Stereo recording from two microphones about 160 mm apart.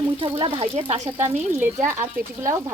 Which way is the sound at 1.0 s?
15° right (ahead or behind).